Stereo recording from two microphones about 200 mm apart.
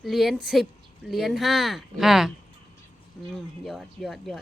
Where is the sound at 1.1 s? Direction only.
Centre (ahead or behind).